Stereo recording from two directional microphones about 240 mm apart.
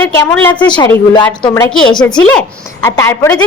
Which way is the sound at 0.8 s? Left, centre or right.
Centre.